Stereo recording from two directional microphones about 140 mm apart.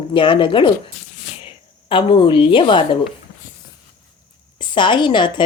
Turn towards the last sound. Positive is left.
turn(degrees=35)  # may be behind; listen again after turning